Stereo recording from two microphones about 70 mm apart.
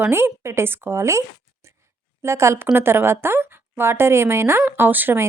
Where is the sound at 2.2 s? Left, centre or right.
Right.